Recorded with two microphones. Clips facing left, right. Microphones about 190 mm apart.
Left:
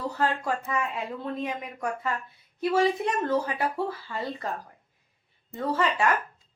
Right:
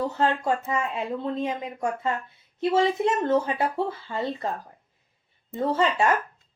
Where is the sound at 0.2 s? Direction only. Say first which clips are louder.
Right 2 dB; 25° right (ahead or behind).